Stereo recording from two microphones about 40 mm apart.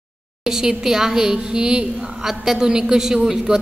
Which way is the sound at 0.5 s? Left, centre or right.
Centre.